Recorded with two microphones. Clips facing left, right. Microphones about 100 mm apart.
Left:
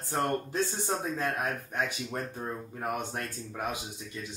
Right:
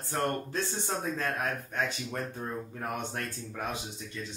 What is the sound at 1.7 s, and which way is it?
Speech, 15° left (ahead or behind).